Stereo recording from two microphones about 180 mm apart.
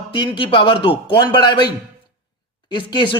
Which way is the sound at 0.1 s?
25° left (ahead or behind).